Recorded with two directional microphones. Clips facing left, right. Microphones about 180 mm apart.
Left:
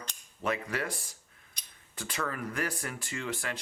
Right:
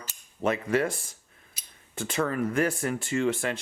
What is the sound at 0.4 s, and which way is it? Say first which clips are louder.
Speech: right 7 dB; 25° right (ahead or behind).